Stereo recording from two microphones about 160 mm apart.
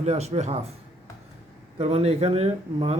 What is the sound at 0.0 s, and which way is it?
Speech, 45° right (ahead or behind).